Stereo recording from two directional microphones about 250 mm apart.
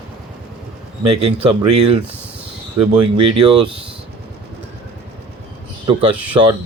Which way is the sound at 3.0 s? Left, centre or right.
Right.